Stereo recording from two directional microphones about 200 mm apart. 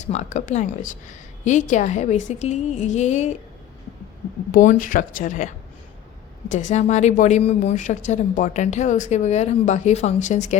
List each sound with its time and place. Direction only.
0.0 s a woman's voice: 35° left (ahead or behind)
4.5 s a woman's voice: 40° left (ahead or behind)
6.5 s a woman's voice: 35° left (ahead or behind)